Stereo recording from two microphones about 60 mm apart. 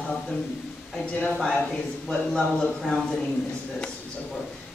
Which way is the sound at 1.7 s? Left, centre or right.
Centre.